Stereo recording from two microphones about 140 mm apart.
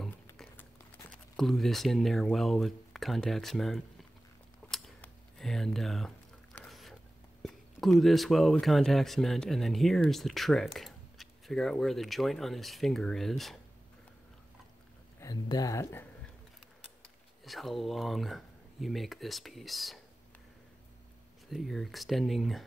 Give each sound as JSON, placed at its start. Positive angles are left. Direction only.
{"t": 1.1, "sound": "speech", "side_deg": 5}
{"t": 4.6, "sound": "a sound", "side_deg": 0}
{"t": 7.4, "sound": "speech", "side_deg": 0}
{"t": 15.1, "sound": "speech", "side_deg": 25}
{"t": 17.5, "sound": "speech", "side_deg": 0}
{"t": 21.5, "sound": "speech", "side_deg": 0}